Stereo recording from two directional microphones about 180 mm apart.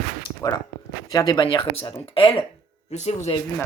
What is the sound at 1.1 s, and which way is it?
Speech, 20° left (ahead or behind).